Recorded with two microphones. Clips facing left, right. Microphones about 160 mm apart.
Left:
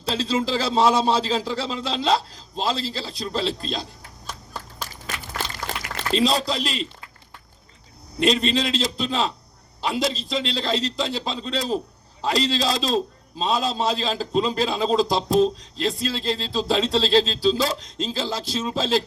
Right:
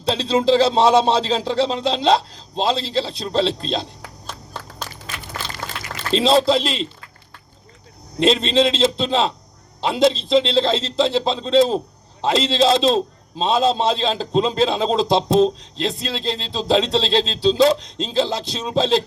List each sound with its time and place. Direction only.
0.0 s a man's voice: 20° right (ahead or behind)
6.1 s a man's voice: 25° right (ahead or behind)
8.2 s a man's voice: 25° right (ahead or behind)